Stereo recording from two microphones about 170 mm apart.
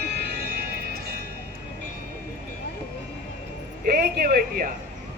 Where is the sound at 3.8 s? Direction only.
60° right (ahead or behind).